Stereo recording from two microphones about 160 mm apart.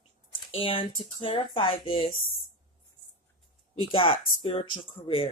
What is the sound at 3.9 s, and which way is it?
Speech, 35° left (ahead or behind).